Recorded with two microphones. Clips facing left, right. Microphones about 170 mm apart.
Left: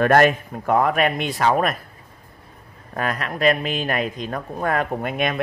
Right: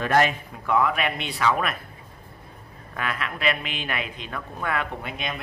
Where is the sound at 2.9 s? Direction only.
40° left (ahead or behind).